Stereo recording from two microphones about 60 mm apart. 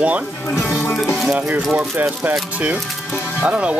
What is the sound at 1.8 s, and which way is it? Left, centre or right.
Speech, right.